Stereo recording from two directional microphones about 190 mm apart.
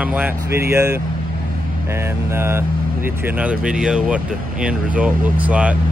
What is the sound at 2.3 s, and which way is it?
Speech, 15° right (ahead or behind).